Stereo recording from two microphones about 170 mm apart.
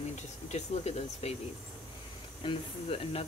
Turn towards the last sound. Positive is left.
turn(degrees=35)  # may be behind; listen again after turning